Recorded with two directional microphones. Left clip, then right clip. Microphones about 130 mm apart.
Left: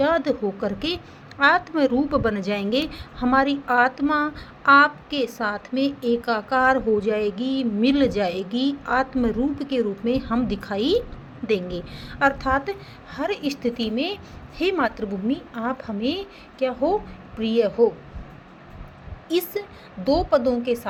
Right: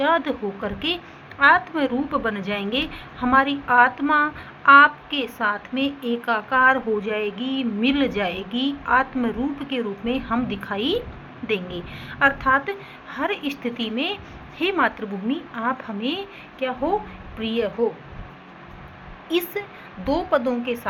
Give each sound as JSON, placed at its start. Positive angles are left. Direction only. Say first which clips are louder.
{"t": 0.0, "sound": "a woman's voice", "louder": "even", "side_deg": 60}
{"t": 19.3, "sound": "speech", "louder": "even", "side_deg": 55}